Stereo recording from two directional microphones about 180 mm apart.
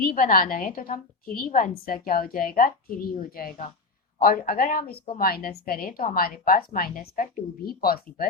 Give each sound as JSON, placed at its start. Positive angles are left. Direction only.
{"t": 0.0, "sound": "a woman's voice", "side_deg": 50}